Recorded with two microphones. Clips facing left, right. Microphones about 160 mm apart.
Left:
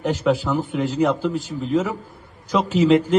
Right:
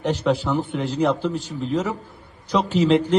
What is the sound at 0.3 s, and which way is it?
A man's voice, 5° left (ahead or behind).